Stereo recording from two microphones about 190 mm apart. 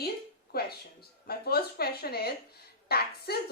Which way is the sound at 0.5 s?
55° left (ahead or behind).